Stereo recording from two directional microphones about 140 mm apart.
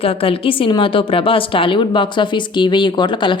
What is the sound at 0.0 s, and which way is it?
A woman's voice, 40° left (ahead or behind).